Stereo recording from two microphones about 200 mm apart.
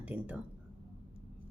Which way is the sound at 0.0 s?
5° right (ahead or behind).